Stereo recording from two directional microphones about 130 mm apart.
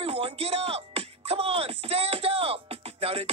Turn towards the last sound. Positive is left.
turn(degrees=-50)  # may be behind; listen again after turning